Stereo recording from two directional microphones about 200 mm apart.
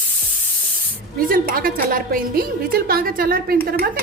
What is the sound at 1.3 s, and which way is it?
A woman's voice, 45° right (ahead or behind).